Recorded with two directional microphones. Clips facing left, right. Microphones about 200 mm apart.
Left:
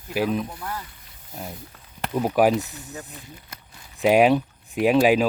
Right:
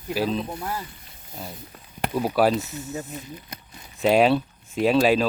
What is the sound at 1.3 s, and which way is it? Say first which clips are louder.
Speech: left 1 dB; 15° left (ahead or behind).